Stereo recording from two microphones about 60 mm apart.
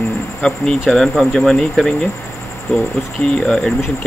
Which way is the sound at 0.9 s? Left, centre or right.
Centre.